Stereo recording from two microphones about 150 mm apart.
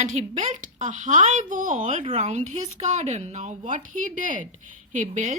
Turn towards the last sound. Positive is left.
turn(degrees=-55)  # may be behind; listen again after turning